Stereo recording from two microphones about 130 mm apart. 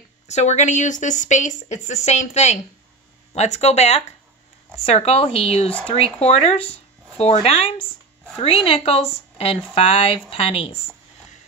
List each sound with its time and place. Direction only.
0.3 s a woman's voice: 60° left (ahead or behind)